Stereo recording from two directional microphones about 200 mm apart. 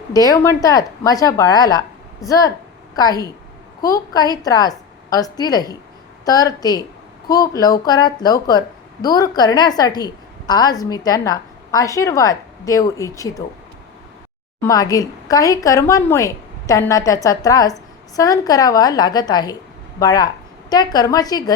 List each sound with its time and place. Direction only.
0.1 s a woman's voice: 15° left (ahead or behind)
14.6 s a woman's voice: 15° left (ahead or behind)